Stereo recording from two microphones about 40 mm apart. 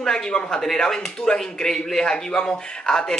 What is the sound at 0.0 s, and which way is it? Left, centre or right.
A man's voice, centre.